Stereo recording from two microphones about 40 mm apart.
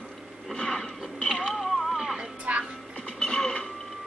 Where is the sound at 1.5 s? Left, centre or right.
Centre.